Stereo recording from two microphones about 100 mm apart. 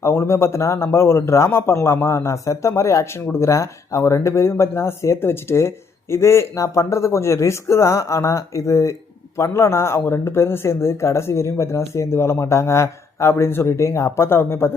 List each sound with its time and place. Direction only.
0.0 s speech: 25° left (ahead or behind)